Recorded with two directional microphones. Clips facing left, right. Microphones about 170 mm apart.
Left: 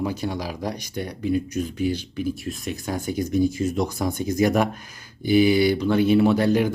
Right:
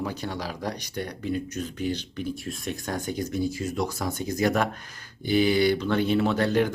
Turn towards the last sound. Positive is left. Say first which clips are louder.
# left 4 dB
turn(degrees=10)  # may be behind; listen again after turning